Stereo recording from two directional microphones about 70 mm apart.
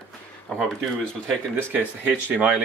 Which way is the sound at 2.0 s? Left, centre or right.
Right.